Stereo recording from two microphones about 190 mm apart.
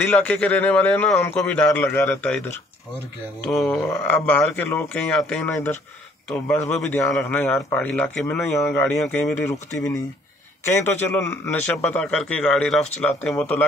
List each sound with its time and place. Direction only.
0.1 s a man's voice: 5° left (ahead or behind)